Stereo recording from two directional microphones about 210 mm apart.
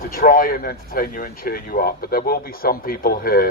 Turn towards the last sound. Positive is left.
turn(degrees=45)  # may be behind; listen again after turning